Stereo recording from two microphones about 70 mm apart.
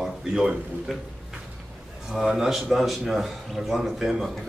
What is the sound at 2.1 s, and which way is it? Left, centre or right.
A man's voice, centre.